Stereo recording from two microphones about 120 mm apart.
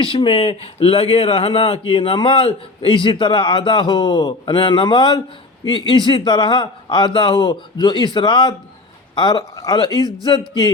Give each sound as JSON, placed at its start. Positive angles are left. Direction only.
{"t": 0.0, "sound": "speech", "side_deg": 45}